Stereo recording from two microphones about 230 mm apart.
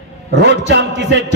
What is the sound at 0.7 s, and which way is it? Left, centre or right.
Speech, right.